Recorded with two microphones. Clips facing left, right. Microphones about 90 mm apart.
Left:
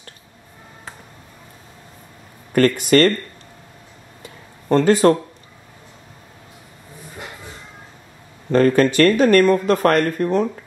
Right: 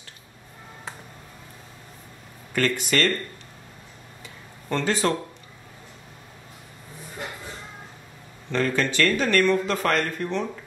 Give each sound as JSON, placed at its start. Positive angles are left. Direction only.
{"t": 2.5, "sound": "speech", "side_deg": 45}
{"t": 4.6, "sound": "speech", "side_deg": 45}
{"t": 8.5, "sound": "speech", "side_deg": 45}